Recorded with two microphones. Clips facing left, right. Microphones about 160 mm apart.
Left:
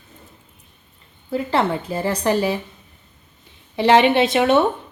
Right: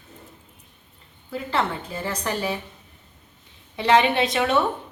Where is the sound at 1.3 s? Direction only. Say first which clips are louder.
Left 6 dB; 35° left (ahead or behind).